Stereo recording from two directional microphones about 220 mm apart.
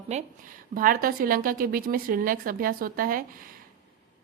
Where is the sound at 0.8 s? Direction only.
40° right (ahead or behind).